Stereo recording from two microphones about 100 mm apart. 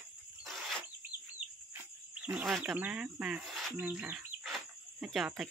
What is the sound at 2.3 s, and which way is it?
Speech, centre (ahead or behind).